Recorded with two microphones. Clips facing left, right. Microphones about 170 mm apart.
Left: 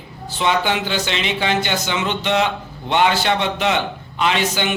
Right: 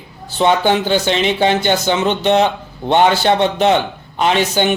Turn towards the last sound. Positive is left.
turn(degrees=-40)  # may be behind; listen again after turning